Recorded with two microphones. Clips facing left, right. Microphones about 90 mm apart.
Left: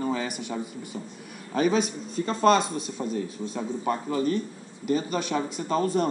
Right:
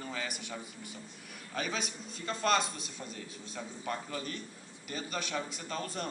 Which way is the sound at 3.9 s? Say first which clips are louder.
Left 12 dB; 30° left (ahead or behind).